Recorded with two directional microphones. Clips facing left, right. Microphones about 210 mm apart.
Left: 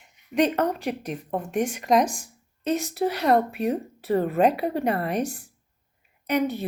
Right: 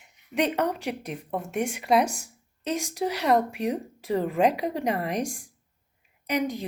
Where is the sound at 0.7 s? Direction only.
10° right (ahead or behind).